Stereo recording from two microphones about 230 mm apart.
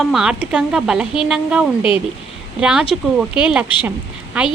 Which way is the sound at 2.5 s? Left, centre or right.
Centre.